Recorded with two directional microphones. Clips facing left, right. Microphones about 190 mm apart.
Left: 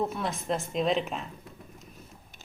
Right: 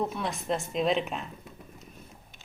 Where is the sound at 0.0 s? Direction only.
Centre (ahead or behind).